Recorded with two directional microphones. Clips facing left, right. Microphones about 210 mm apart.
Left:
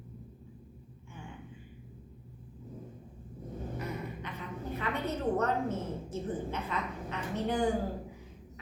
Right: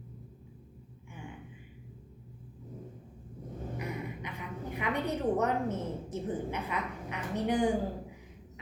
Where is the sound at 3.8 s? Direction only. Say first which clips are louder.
Right 2 dB; 15° right (ahead or behind).